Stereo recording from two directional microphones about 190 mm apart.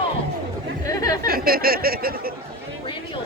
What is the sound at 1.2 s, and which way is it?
Speech, 50° right (ahead or behind).